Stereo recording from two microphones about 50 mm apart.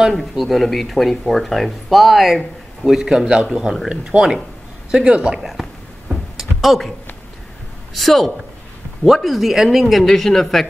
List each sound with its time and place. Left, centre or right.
0.1 s speech: centre
3.9 s a woman's voice: right
5.4 s speech: centre
6.3 s a sound: centre
7.9 s speech: centre